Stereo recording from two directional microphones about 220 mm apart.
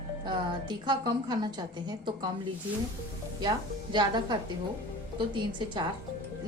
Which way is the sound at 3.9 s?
20° right (ahead or behind).